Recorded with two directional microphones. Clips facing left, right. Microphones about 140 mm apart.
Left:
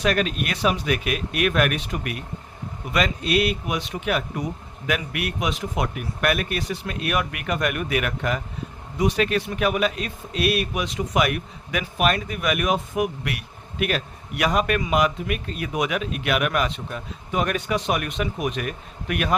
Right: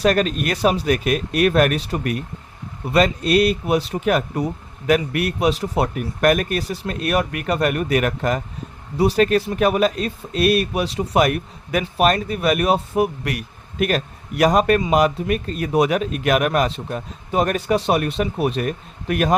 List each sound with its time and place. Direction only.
0.0 s speech: 40° right (ahead or behind)